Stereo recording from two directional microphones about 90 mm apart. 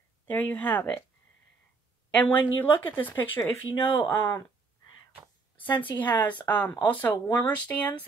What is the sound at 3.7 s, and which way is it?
Speech, 65° left (ahead or behind).